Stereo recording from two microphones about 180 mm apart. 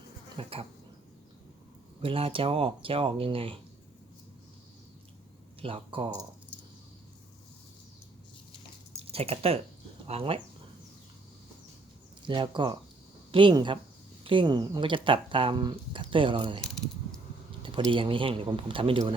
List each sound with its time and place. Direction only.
0.4 s speech: 30° right (ahead or behind)
2.0 s speech: 30° right (ahead or behind)
5.6 s speech: 30° right (ahead or behind)
9.0 s a sound: 35° right (ahead or behind)
10.1 s speech: 30° right (ahead or behind)
12.2 s speech: 25° right (ahead or behind)
17.6 s speech: 30° right (ahead or behind)